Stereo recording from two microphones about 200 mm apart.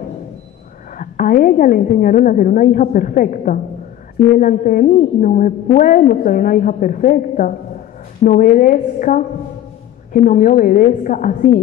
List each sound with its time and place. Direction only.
0.9 s a woman's voice: 45° left (ahead or behind)